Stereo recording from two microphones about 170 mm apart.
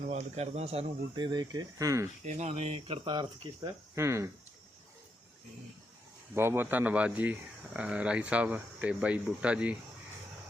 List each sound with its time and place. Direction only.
0.0 s speech: 40° right (ahead or behind); by 2.0 s 20° right (ahead or behind)
2.2 s speech: 40° right (ahead or behind); by 4.3 s 15° right (ahead or behind)
6.3 s speech: 15° right (ahead or behind)